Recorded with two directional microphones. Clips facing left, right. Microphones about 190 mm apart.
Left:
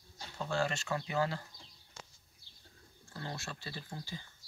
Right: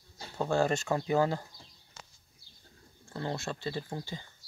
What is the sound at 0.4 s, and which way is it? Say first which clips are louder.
Speech: right 7 dB; 45° right (ahead or behind).